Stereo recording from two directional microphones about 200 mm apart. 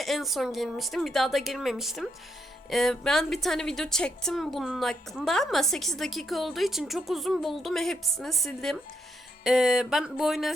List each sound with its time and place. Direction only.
0.0 s a woman's voice: centre (ahead or behind)